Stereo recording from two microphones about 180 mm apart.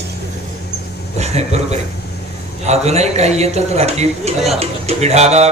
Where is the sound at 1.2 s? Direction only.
35° right (ahead or behind).